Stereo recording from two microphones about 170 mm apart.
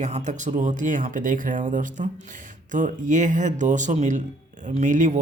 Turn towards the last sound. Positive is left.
turn(degrees=-45)  # may be behind; listen again after turning